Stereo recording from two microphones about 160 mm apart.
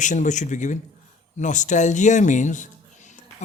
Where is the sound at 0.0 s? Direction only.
50° left (ahead or behind).